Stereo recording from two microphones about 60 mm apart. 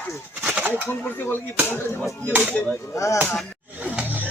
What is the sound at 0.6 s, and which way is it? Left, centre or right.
Speech, right.